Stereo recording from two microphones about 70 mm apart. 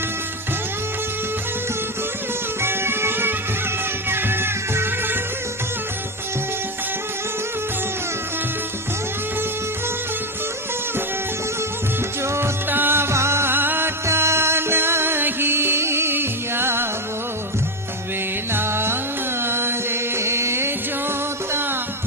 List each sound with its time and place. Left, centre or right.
2.6 s music: right
12.2 s music: right
18.5 s music: right